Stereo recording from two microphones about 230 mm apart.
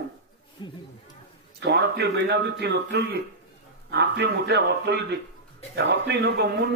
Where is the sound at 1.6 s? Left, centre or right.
Right.